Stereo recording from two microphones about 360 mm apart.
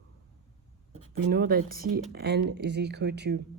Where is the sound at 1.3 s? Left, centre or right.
Right.